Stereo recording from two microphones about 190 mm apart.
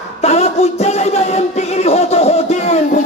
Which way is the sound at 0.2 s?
35° left (ahead or behind).